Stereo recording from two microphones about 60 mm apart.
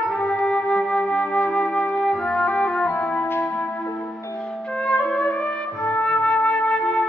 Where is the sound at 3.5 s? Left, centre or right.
Centre.